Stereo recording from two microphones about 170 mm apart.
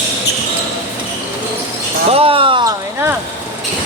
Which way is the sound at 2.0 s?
35° right (ahead or behind).